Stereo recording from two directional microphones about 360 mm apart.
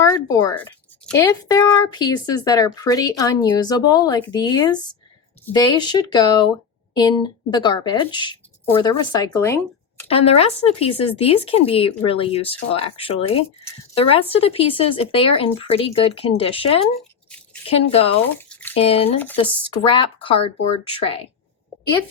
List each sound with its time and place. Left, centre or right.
0.0 s speech: centre
17.0 s toothbrush: centre
17.9 s speech: centre
18.3 s bathtub: centre
18.8 s speech: centre